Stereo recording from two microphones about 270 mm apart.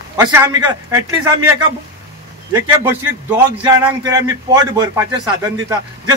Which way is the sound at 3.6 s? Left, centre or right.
Centre.